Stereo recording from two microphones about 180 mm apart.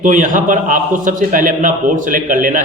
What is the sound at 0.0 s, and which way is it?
A man's voice, 45° right (ahead or behind).